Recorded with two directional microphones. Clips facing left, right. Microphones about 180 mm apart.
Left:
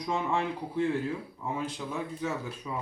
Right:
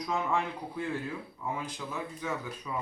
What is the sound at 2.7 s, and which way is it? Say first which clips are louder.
Speech: even; 20° left (ahead or behind).